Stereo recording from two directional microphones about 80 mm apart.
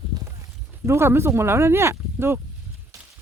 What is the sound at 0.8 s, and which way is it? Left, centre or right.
Speech, right.